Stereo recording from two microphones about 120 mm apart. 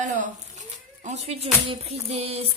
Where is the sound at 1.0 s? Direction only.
70° right (ahead or behind); by 2.5 s 55° right (ahead or behind).